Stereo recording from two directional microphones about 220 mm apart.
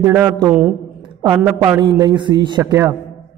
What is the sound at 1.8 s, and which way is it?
Speech, 20° right (ahead or behind).